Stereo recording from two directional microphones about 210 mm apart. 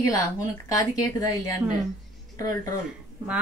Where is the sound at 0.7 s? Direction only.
15° left (ahead or behind).